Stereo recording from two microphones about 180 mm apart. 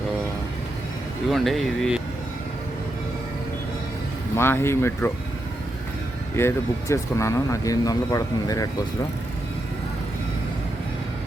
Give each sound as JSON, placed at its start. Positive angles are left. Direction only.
{"t": 1.3, "sound": "speech", "side_deg": 0}
{"t": 4.4, "sound": "speech", "side_deg": 15}
{"t": 6.3, "sound": "speech", "side_deg": 15}